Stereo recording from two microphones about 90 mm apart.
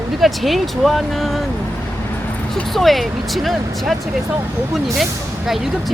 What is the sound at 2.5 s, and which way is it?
Speech, centre (ahead or behind).